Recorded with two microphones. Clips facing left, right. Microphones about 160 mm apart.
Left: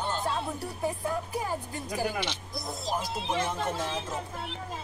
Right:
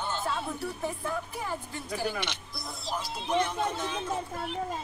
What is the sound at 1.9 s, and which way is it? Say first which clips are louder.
Speech: left 1 dB; 15° left (ahead or behind).